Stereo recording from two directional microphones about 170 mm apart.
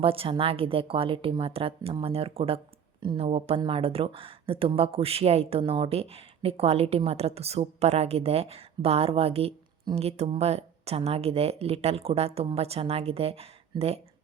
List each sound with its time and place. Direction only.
0.0 s speech: 35° right (ahead or behind)